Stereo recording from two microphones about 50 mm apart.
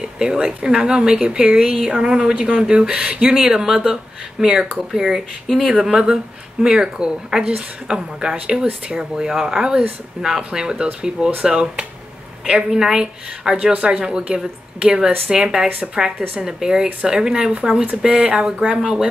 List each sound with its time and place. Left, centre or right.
0.0 s speech: centre